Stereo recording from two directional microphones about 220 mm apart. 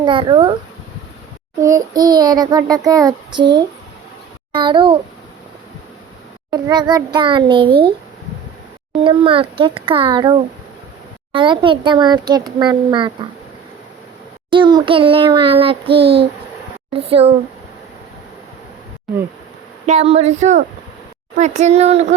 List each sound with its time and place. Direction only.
0.0 s a child's voice: 20° right (ahead or behind)
1.6 s child singing: 15° right (ahead or behind)
4.5 s a child's voice: 20° right (ahead or behind)
6.5 s a child's voice: 20° right (ahead or behind)
9.0 s a child's voice: 25° right (ahead or behind)
14.5 s a child's voice: 20° right (ahead or behind)
19.8 s speech: 30° right (ahead or behind)